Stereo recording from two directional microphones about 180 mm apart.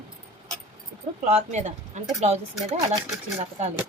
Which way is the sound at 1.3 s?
40° right (ahead or behind).